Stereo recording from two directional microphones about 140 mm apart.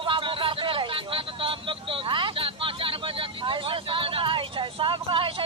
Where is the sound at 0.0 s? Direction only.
35° right (ahead or behind).